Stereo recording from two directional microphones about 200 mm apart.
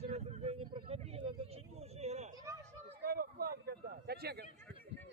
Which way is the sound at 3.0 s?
50° right (ahead or behind).